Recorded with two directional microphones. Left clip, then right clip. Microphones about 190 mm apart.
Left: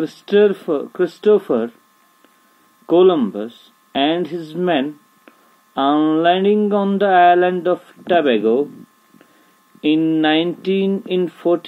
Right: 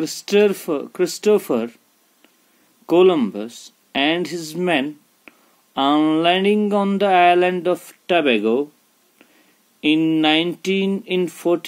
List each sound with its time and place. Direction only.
0.3 s speech: 35° right (ahead or behind)
2.9 s speech: 35° right (ahead or behind)
4.3 s speech: 5° right (ahead or behind)
4.6 s speech: 35° right (ahead or behind)
9.8 s speech: 35° right (ahead or behind)